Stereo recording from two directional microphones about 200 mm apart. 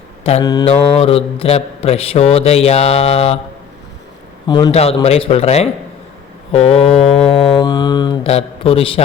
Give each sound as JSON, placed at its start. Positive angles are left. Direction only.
{"t": 0.4, "sound": "mantra", "side_deg": 20}
{"t": 0.7, "sound": "speech", "side_deg": 30}
{"t": 4.4, "sound": "mantra", "side_deg": 20}
{"t": 5.0, "sound": "speech", "side_deg": 30}
{"t": 6.5, "sound": "mantra", "side_deg": 30}